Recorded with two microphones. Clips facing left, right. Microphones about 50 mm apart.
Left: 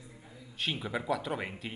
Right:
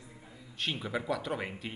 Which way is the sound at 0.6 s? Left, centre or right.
Centre.